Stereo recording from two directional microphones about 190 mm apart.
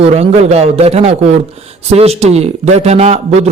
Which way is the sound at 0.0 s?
35° right (ahead or behind).